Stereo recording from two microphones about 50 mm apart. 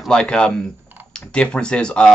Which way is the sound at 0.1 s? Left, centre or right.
Centre.